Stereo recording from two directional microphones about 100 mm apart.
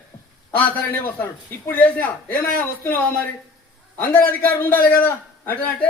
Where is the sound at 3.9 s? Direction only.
20° left (ahead or behind).